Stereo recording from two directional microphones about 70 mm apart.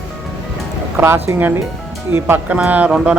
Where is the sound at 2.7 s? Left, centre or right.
Right.